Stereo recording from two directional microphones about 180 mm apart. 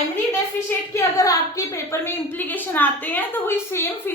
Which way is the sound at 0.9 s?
15° left (ahead or behind).